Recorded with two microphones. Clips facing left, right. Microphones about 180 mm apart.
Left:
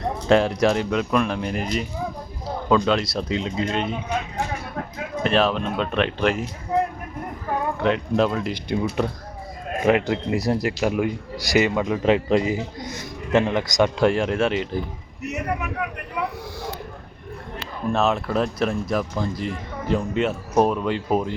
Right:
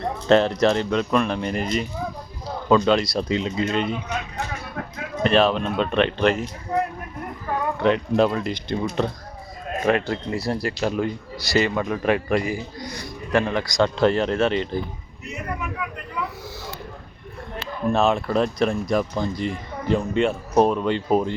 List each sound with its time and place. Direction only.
0.3 s speech: 10° left (ahead or behind)
5.2 s speech: centre (ahead or behind)
7.8 s speech: centre (ahead or behind)
9.8 s a man's voice: 15° left (ahead or behind)
15.2 s speech: 65° left (ahead or behind)
17.9 s speech: centre (ahead or behind)